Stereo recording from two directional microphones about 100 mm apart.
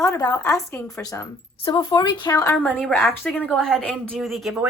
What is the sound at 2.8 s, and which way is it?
Speech, 10° left (ahead or behind).